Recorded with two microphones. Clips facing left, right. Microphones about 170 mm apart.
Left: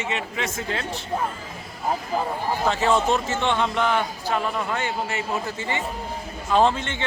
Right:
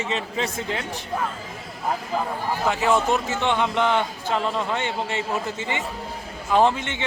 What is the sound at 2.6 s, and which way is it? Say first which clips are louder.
A man's voice: even; 10° right (ahead or behind).